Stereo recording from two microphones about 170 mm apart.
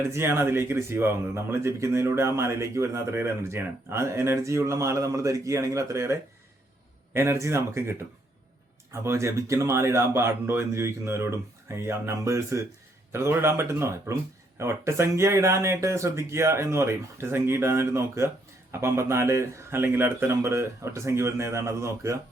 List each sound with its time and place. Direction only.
0.1 s speech: 15° right (ahead or behind)